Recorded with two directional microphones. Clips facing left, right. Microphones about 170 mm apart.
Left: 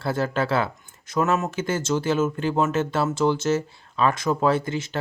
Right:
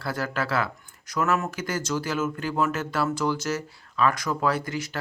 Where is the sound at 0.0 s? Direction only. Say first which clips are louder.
Left 5 dB; 25° left (ahead or behind).